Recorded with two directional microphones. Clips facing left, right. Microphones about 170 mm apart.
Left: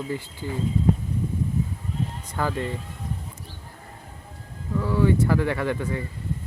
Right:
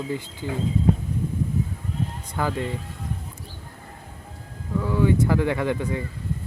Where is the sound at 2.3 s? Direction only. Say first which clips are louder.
Right 1 dB; 15° right (ahead or behind).